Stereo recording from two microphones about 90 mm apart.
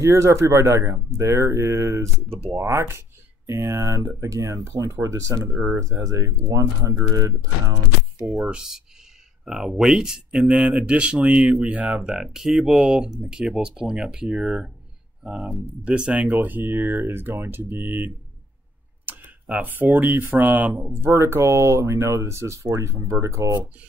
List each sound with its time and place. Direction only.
0.0 s speech: 35° right (ahead or behind)
8.3 s speech: 5° right (ahead or behind)
15.8 s speech: 15° right (ahead or behind)
16.3 s speech: 20° right (ahead or behind)
20.7 s speech: 30° right (ahead or behind)